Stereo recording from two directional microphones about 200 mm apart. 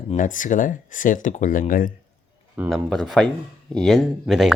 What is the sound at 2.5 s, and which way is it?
Speech, 10° right (ahead or behind).